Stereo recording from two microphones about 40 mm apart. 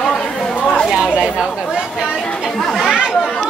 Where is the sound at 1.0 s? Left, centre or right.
Right.